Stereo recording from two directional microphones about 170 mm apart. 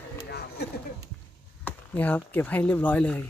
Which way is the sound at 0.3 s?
70° left (ahead or behind).